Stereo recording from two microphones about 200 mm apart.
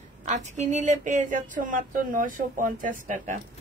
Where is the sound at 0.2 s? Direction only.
35° right (ahead or behind).